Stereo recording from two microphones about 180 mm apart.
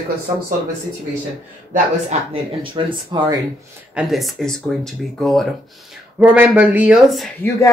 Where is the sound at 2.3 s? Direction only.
30° right (ahead or behind).